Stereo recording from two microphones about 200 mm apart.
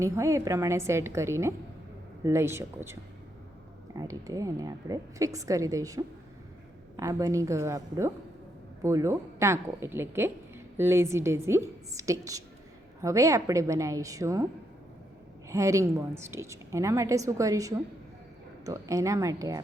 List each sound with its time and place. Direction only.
0.0 s a woman's voice: 15° right (ahead or behind)
15.4 s a woman's voice: 15° right (ahead or behind)